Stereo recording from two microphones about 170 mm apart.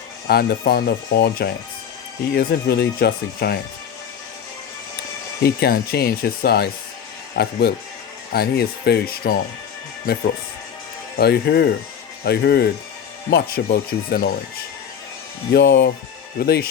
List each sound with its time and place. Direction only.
0.3 s speech: 65° left (ahead or behind)
5.4 s speech: 65° left (ahead or behind)
11.2 s speech: 70° left (ahead or behind)
15.5 s speech: 90° left
16.4 s speech: 65° left (ahead or behind)